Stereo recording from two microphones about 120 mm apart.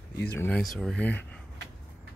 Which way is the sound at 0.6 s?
5° left (ahead or behind).